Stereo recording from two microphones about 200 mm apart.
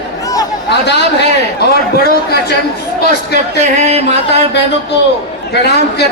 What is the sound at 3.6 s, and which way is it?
Speech, 35° right (ahead or behind).